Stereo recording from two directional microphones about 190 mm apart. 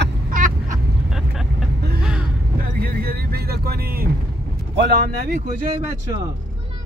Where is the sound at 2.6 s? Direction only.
50° right (ahead or behind).